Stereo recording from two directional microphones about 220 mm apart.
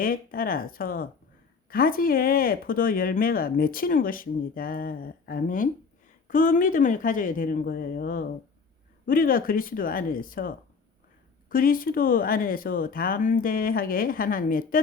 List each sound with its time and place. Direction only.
0.0 s speech: 40° left (ahead or behind)